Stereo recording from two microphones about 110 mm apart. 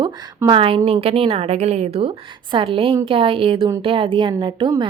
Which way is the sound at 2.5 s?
55° right (ahead or behind).